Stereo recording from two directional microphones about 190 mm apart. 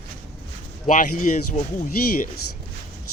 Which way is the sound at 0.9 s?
45° left (ahead or behind).